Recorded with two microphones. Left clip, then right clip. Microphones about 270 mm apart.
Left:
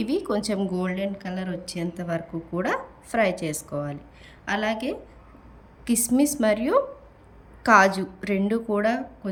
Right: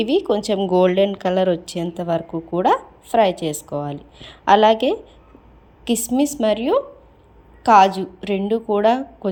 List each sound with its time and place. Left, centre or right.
0.0 s a woman's voice: centre